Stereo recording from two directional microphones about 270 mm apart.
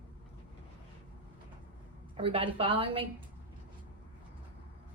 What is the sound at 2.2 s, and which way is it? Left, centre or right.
Speech, centre.